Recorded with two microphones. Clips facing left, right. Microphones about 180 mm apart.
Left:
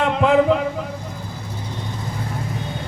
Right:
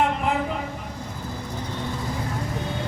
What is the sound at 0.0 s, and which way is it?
Vehicle, 90° left.